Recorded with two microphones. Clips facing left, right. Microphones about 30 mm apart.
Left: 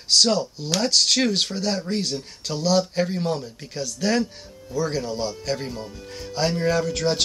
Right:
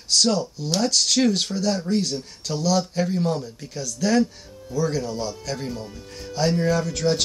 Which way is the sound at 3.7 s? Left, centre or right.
Left.